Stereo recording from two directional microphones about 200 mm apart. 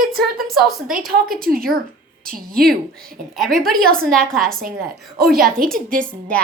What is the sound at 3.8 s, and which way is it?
Speech, 50° right (ahead or behind).